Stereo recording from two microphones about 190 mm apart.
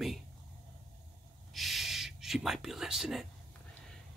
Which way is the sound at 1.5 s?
Centre (ahead or behind).